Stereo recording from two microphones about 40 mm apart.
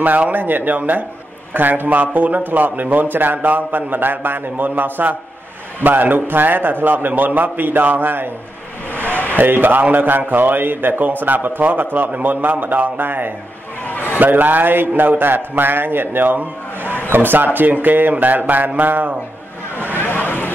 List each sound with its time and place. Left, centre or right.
0.0 s a man's voice: right
9.1 s a sound: left
9.4 s a man's voice: right
13.8 s a sound: left
14.2 s a man's voice: right
20.0 s vehicle: left